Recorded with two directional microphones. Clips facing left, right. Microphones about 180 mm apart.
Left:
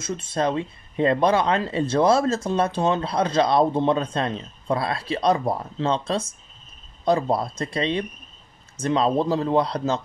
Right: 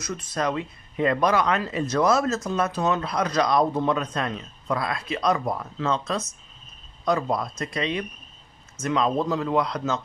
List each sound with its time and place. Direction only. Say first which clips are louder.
0.0 s speech: left 3 dB; 25° left (ahead or behind)